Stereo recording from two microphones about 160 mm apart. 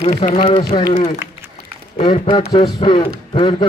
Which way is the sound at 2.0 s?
40° left (ahead or behind).